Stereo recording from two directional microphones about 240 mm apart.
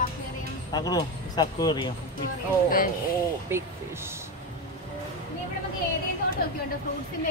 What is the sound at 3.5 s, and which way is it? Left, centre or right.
Speech, centre.